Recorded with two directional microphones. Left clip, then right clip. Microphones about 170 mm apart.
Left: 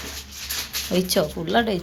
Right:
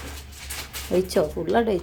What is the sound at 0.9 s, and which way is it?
Speech, 15° right (ahead or behind).